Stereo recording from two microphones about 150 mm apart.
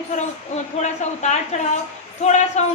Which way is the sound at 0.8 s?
50° left (ahead or behind).